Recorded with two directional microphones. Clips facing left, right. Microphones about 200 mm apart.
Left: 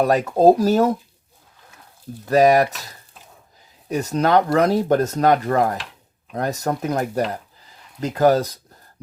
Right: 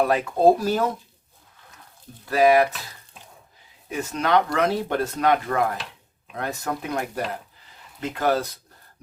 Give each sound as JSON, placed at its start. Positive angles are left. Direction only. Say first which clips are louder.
{"t": 0.0, "sound": "speech", "louder": "left 4 dB", "side_deg": 40}
{"t": 2.2, "sound": "speech", "louder": "left 3 dB", "side_deg": 40}
{"t": 3.8, "sound": "speech", "louder": "left 5 dB", "side_deg": 40}